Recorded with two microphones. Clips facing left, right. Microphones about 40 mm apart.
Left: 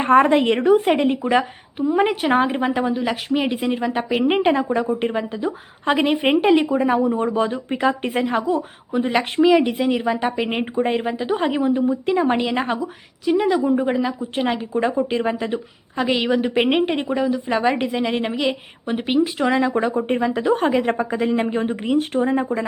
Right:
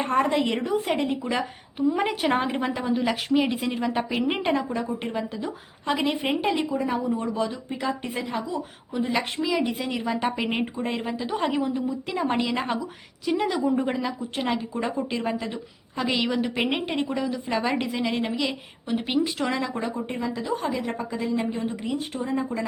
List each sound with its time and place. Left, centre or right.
0.0 s speech: left
1.2 s a woman's voice: left
2.9 s a woman's voice: centre; by 5.5 s left
5.5 s speech: left
8.9 s speech: left
9.8 s a woman's voice: centre
11.6 s speech: left
12.1 s a woman's voice: left
13.2 s a woman's voice: centre; by 22.6 s left